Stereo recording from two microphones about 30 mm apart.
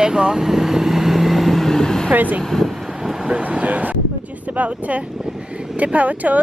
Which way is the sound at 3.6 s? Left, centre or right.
Right.